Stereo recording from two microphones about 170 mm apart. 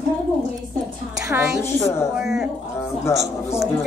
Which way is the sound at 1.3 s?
15° right (ahead or behind).